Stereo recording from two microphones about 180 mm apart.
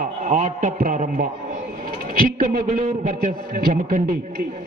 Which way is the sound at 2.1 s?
50° right (ahead or behind).